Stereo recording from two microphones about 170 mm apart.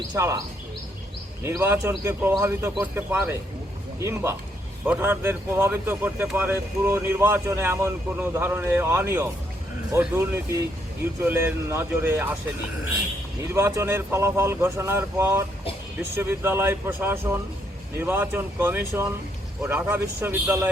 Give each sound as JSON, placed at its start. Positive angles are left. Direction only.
{"t": 0.1, "sound": "speech", "side_deg": -20}
{"t": 1.5, "sound": "speech", "side_deg": -15}
{"t": 13.5, "sound": "speech", "side_deg": -15}